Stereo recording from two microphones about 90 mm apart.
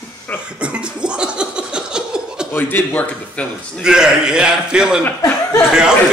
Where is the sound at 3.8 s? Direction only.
10° right (ahead or behind).